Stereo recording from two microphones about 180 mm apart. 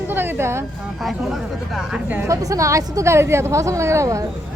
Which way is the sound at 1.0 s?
Centre (ahead or behind).